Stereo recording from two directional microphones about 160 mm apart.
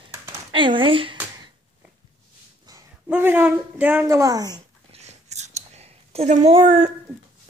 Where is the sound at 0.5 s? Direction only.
30° right (ahead or behind).